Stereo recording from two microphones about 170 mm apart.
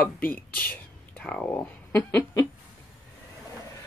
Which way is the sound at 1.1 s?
5° left (ahead or behind).